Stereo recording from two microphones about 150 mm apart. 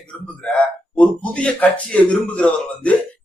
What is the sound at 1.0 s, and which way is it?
A man's voice, 10° left (ahead or behind).